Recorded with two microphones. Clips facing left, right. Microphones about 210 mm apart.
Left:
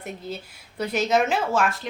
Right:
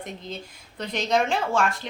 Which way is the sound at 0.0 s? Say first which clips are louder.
Left 2 dB; 10° left (ahead or behind).